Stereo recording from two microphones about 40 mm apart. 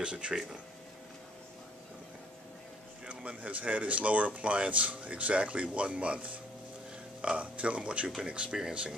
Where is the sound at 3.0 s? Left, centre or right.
Right.